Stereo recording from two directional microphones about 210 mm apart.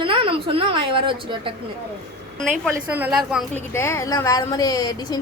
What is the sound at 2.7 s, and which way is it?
Speech, 10° right (ahead or behind).